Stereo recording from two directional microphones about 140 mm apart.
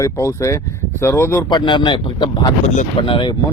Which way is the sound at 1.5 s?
35° left (ahead or behind).